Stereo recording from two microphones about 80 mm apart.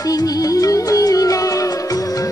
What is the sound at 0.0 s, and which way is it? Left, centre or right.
Music, left.